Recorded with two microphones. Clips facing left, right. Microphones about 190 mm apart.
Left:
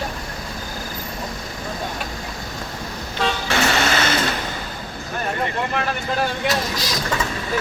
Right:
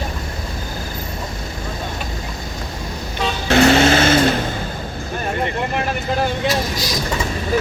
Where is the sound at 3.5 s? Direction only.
55° right (ahead or behind).